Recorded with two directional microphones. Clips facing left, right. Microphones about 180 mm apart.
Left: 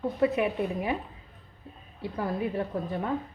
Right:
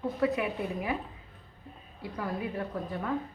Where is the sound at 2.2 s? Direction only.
25° left (ahead or behind).